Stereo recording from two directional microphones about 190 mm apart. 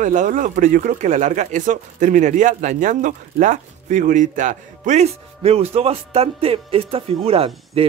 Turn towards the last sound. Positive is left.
turn(degrees=-30)  # may be behind; listen again after turning